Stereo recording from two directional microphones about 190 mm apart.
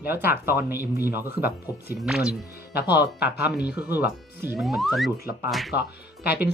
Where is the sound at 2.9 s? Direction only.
60° left (ahead or behind).